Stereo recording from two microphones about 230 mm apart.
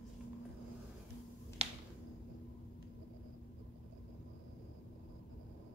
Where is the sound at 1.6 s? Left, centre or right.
Right.